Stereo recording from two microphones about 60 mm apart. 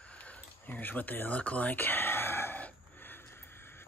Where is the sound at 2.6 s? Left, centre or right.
Left.